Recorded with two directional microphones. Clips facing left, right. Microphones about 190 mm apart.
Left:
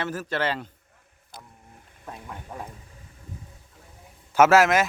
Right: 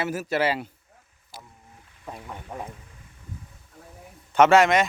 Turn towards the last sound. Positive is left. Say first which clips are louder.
# even
turn(degrees=5)  # may be behind; listen again after turning